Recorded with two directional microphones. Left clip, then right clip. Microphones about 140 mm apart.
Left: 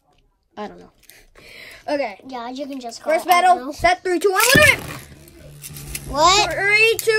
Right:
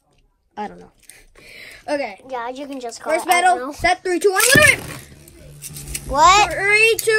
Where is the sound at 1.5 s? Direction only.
90° left.